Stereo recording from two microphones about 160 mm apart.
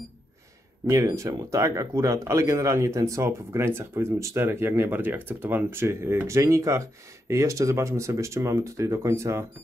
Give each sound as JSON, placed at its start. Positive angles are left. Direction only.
{"t": 0.8, "sound": "speech", "side_deg": -20}